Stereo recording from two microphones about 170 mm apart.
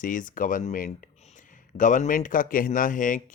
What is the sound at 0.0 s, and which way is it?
Speech, 50° left (ahead or behind).